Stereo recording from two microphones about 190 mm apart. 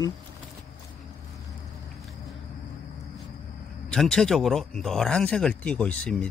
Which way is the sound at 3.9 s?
5° left (ahead or behind).